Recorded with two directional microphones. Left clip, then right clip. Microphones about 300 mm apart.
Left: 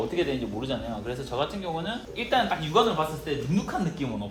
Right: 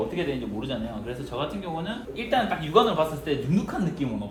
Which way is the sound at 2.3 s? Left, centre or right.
Centre.